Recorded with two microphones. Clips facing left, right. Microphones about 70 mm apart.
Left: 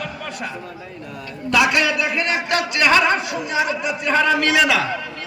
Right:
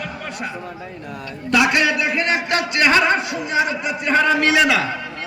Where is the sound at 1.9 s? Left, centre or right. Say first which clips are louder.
Right 1 dB; right.